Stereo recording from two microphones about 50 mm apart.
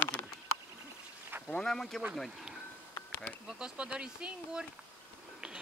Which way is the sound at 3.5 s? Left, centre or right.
Right.